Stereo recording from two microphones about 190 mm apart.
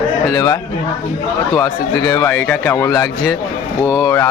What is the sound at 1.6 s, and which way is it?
Speech, 20° left (ahead or behind).